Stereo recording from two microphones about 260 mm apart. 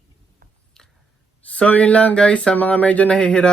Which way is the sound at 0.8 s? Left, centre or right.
Centre.